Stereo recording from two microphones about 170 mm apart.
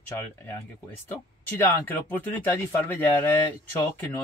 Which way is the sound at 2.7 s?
15° left (ahead or behind).